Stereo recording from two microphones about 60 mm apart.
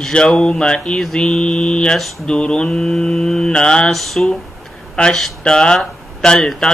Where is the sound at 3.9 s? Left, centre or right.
Centre.